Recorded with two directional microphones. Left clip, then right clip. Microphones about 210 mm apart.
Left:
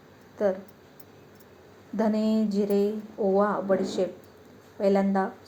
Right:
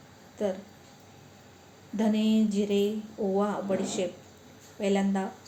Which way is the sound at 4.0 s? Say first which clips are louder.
Left 3 dB; 35° left (ahead or behind).